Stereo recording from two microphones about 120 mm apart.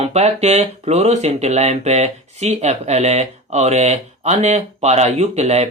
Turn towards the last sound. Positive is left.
turn(degrees=-60)  # may be behind; listen again after turning